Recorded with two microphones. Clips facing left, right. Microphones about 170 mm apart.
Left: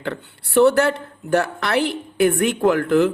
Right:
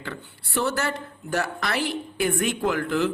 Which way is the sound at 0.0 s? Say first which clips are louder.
Left 8 dB; 65° left (ahead or behind).